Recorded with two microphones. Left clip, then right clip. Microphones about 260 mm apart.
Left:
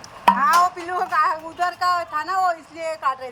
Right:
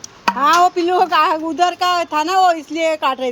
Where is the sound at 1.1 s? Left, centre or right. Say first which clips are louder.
Right 6 dB; right.